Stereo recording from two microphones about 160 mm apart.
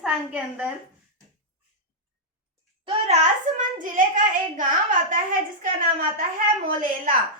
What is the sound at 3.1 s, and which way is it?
Speech, 45° right (ahead or behind).